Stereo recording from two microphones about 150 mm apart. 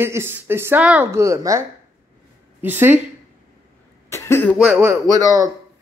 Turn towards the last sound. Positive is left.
turn(degrees=-20)  # may be behind; listen again after turning